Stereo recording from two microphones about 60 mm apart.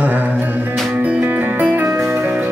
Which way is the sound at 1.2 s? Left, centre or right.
Right.